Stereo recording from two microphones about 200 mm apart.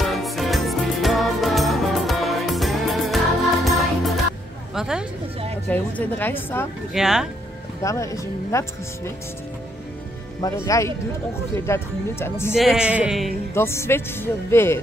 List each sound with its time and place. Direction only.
0.0 s music: centre (ahead or behind)
4.7 s speech: 5° right (ahead or behind)
5.7 s speech: 10° left (ahead or behind)
6.9 s speech: centre (ahead or behind)
7.8 s speech: 15° left (ahead or behind)
10.4 s speech: 20° left (ahead or behind)
12.5 s speech: 5° right (ahead or behind)
13.6 s speech: 10° left (ahead or behind)